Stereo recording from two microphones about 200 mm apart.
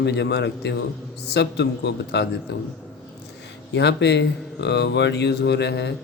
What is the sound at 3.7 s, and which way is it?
Speech, 60° left (ahead or behind).